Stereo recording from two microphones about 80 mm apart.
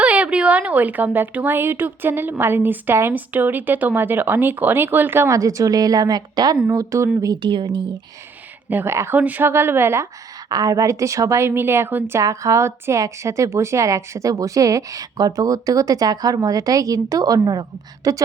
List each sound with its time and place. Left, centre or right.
0.0 s speech: centre
5.3 s a woman's voice: right
6.7 s a woman's voice: right
7.4 s speech: right
8.7 s a woman's voice: right
10.5 s a woman's voice: right
12.2 s a woman's voice: right